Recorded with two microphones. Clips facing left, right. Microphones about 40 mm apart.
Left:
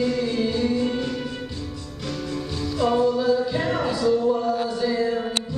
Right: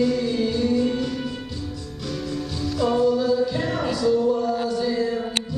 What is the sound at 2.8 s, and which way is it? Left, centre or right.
Music, centre.